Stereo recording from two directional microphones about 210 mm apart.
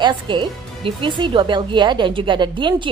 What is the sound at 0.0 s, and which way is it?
A woman's voice, 20° right (ahead or behind).